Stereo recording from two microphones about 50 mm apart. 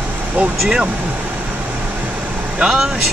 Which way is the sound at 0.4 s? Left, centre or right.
Right.